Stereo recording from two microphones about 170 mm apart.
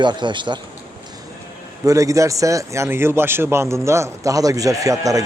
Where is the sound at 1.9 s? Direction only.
20° right (ahead or behind).